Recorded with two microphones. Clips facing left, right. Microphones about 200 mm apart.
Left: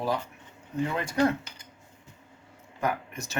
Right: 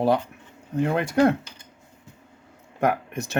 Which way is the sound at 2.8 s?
60° right (ahead or behind).